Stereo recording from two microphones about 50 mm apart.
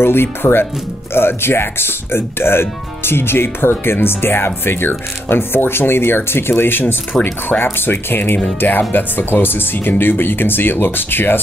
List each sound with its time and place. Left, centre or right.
0.0 s speech: left